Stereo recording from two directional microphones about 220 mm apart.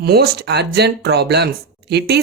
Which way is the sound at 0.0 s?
45° right (ahead or behind).